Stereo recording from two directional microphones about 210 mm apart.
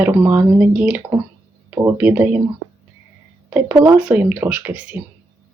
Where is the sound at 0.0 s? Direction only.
10° right (ahead or behind).